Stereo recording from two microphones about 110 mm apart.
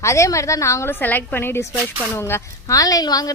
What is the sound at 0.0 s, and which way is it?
A woman's voice, 30° left (ahead or behind).